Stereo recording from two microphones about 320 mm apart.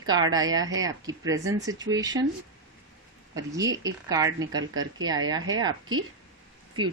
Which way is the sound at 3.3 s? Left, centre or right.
Centre.